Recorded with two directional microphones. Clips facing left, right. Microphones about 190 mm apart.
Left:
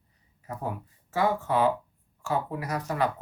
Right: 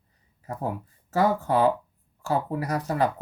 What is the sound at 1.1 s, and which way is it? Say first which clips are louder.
Speech: right 3 dB; 40° right (ahead or behind).